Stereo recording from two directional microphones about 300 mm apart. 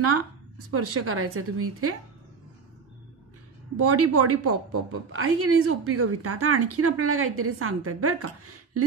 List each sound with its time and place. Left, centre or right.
0.7 s a woman's voice: right
3.7 s a woman's voice: right